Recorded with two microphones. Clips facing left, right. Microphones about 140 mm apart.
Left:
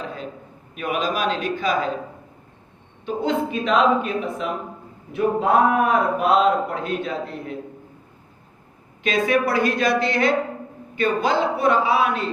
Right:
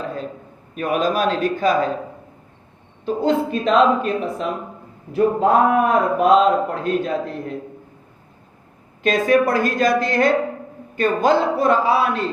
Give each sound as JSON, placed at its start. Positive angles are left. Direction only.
{"t": 0.0, "sound": "a sound", "side_deg": -45}
{"t": 0.8, "sound": "a woman's voice", "side_deg": -45}
{"t": 3.1, "sound": "a man's voice", "side_deg": -40}
{"t": 9.0, "sound": "a woman's voice", "side_deg": -45}